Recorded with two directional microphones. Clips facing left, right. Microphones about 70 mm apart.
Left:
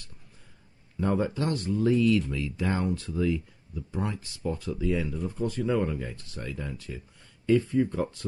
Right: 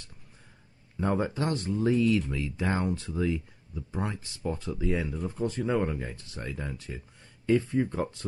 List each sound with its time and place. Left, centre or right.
1.0 s speech: right